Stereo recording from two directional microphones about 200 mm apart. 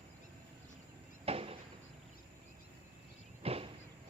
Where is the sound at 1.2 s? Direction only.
30° right (ahead or behind).